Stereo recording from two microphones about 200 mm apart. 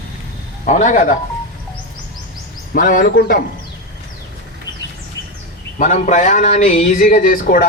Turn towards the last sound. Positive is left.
turn(degrees=45)  # may be behind; listen again after turning